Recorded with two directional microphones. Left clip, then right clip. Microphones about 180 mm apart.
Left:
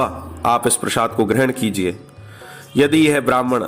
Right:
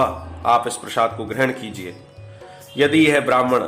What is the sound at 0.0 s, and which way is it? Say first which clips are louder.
A man's voice: even; 40° left (ahead or behind).